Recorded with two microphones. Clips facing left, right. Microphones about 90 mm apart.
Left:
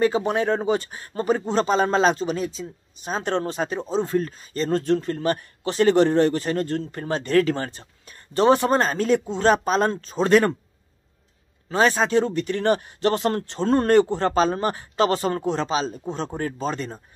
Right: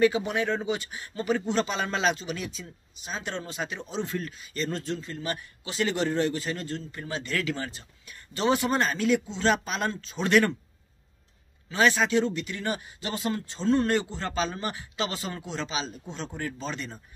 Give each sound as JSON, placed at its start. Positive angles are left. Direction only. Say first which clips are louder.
{"t": 0.0, "sound": "speech", "louder": "left 3 dB", "side_deg": 35}
{"t": 11.7, "sound": "speech", "louder": "left 4 dB", "side_deg": 35}